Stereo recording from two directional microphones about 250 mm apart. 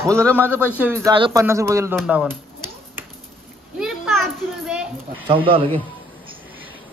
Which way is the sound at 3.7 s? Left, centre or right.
Centre.